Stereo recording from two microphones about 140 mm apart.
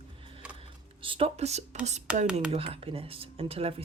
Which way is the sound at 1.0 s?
40° right (ahead or behind).